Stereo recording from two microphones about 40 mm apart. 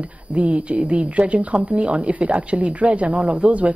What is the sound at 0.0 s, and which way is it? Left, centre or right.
Speech, right.